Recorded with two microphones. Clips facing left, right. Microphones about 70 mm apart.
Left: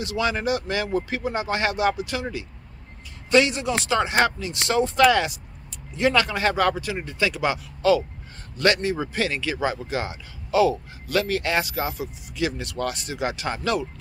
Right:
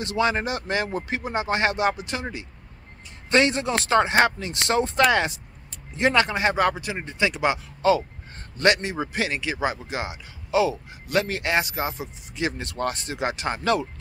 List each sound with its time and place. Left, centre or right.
0.0 s a man's voice: right